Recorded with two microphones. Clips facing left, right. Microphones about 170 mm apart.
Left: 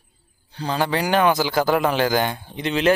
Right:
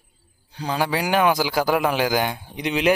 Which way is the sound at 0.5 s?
10° right (ahead or behind).